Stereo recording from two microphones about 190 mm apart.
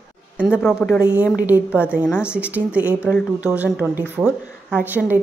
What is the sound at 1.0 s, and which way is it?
A woman's voice, 5° right (ahead or behind).